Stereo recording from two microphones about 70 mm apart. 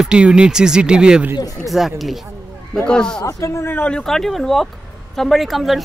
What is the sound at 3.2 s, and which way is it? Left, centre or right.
Speech, left.